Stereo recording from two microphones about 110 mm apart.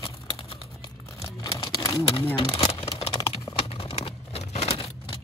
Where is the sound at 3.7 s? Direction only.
60° left (ahead or behind).